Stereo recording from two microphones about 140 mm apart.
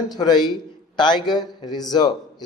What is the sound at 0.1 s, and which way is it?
A man's voice, 30° left (ahead or behind).